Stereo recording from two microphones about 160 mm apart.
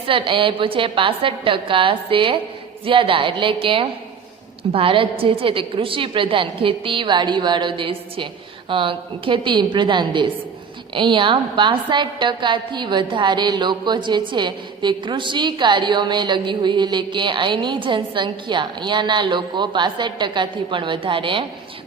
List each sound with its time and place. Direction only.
0.1 s a woman's voice: 35° right (ahead or behind)